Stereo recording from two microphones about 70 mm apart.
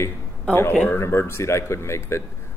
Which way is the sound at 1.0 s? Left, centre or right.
Left.